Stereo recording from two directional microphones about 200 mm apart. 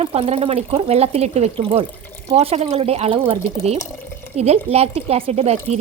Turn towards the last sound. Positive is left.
turn(degrees=-30)  # may be behind; listen again after turning